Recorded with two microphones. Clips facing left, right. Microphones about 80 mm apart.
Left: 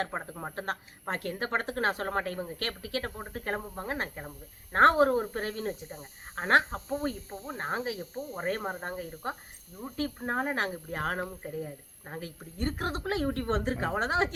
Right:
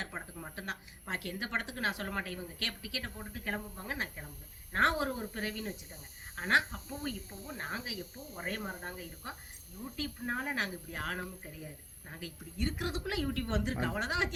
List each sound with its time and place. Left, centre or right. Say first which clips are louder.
0.0 s speech: left 8 dB; left